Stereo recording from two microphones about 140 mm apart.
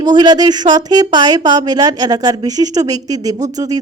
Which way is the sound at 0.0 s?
30° right (ahead or behind).